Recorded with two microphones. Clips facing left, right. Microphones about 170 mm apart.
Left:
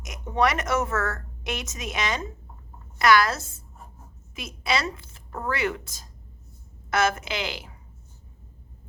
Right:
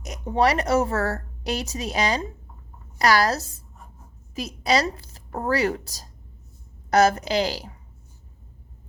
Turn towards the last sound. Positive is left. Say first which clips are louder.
# right 8 dB
turn(degrees=-35)  # may be behind; listen again after turning